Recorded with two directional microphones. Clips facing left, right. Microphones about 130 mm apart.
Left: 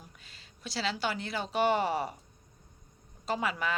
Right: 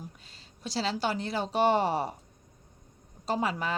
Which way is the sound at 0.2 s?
35° right (ahead or behind).